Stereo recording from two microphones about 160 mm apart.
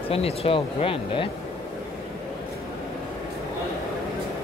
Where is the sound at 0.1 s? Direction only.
40° left (ahead or behind).